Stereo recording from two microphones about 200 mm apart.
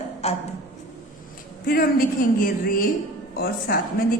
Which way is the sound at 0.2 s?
30° left (ahead or behind).